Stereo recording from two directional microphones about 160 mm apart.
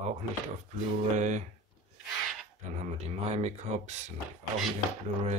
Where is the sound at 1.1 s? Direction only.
45° right (ahead or behind).